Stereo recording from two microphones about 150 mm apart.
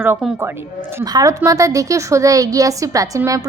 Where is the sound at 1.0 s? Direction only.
25° right (ahead or behind).